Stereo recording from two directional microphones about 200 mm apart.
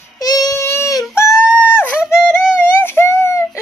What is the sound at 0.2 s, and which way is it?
Child singing, 20° left (ahead or behind).